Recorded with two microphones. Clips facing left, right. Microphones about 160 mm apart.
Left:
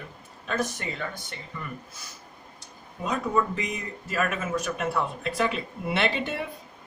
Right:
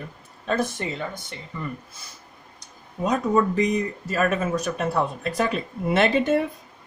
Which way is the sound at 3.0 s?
40° right (ahead or behind).